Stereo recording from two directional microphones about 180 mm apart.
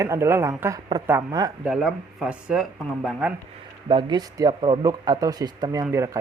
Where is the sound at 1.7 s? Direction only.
5° right (ahead or behind).